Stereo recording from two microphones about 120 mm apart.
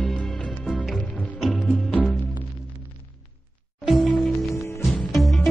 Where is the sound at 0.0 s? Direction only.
5° left (ahead or behind).